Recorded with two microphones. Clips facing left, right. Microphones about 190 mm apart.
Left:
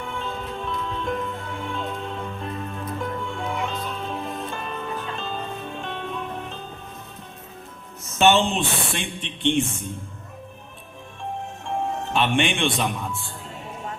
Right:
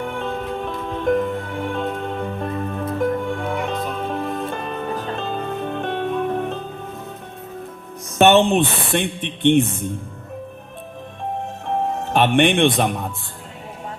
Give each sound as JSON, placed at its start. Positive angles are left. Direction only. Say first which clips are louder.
{"t": 0.0, "sound": "music", "louder": "right 6 dB", "side_deg": -60}
{"t": 8.2, "sound": "speech", "louder": "right 5 dB", "side_deg": -60}
{"t": 12.0, "sound": "speech", "louder": "right 7 dB", "side_deg": -60}